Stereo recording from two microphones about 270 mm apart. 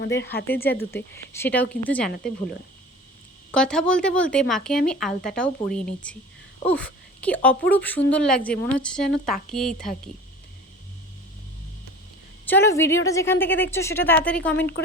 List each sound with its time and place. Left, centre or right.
0.0 s speech: left
0.9 s speech: centre
2.0 s speech: left
3.5 s speech: centre
12.5 s speech: centre